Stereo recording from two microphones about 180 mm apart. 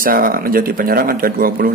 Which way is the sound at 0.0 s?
55° right (ahead or behind).